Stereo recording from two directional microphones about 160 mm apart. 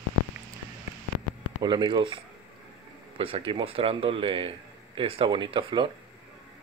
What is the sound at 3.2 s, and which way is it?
A man's voice, 35° right (ahead or behind).